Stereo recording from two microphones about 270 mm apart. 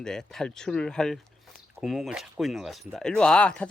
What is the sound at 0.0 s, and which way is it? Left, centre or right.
Speech, centre.